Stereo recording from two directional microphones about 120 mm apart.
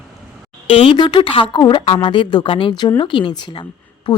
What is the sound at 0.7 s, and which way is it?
Speech, 55° left (ahead or behind).